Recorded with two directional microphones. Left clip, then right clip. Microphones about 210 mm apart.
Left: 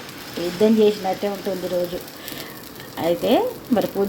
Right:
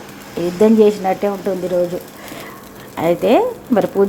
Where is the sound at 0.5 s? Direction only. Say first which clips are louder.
Right 5 dB; 20° right (ahead or behind).